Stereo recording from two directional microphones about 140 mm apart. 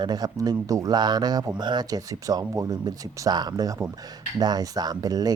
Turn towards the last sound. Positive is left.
turn(degrees=-25)  # may be behind; listen again after turning